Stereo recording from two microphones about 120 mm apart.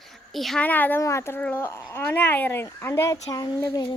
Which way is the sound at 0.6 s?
15° left (ahead or behind).